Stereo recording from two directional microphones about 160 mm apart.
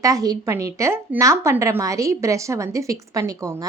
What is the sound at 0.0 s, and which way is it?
A woman's voice, 20° right (ahead or behind).